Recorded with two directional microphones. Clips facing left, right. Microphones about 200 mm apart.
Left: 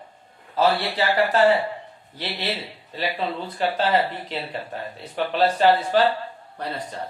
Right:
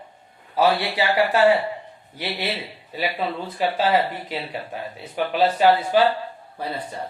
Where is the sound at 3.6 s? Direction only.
10° right (ahead or behind).